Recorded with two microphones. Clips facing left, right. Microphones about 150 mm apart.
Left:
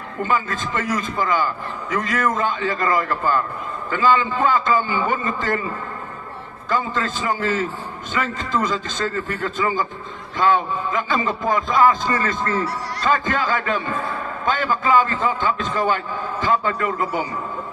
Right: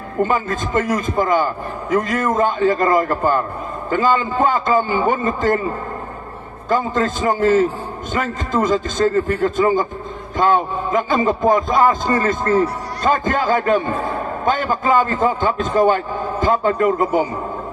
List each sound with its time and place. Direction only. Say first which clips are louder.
0.2 s a man's voice: right 4 dB; 45° right (ahead or behind)
6.7 s a man's voice: right 5 dB; 45° right (ahead or behind)